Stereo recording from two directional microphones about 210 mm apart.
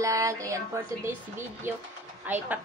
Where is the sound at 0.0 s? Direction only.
15° right (ahead or behind).